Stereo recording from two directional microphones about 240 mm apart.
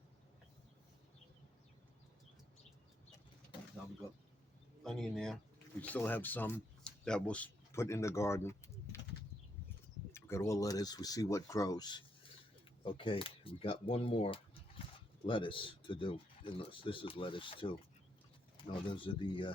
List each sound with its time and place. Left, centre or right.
4.8 s speech: centre
10.1 s speech: centre